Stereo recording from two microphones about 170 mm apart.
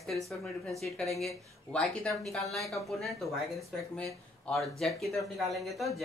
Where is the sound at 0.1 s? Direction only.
Centre (ahead or behind).